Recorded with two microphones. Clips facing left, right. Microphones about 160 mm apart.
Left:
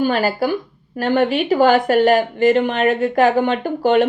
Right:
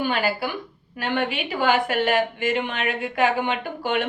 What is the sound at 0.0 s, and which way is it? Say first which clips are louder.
Speech: left 6 dB; 40° left (ahead or behind).